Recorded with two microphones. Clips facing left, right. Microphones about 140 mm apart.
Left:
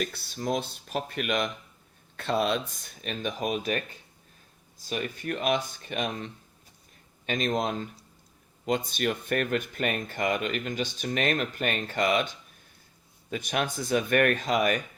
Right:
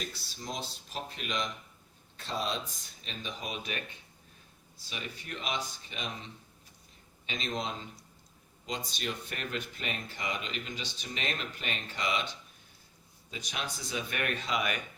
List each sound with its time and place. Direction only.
0.0 s speech: 60° left (ahead or behind)
4.9 s speech: 50° left (ahead or behind)
13.3 s speech: 55° left (ahead or behind)